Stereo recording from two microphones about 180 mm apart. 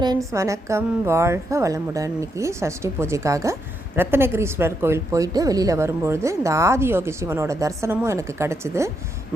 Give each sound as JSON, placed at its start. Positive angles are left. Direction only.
{"t": 0.0, "sound": "a woman's voice", "side_deg": -20}